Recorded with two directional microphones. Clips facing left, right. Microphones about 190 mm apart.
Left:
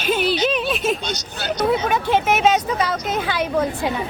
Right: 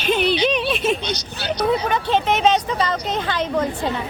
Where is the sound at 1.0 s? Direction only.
45° left (ahead or behind).